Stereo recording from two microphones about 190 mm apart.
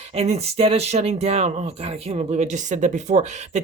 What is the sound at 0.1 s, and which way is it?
Speech, 35° right (ahead or behind).